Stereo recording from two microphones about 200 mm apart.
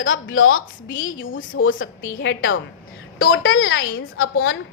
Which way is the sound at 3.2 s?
90° left.